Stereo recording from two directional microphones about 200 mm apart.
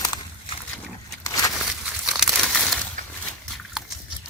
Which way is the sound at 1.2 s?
15° left (ahead or behind).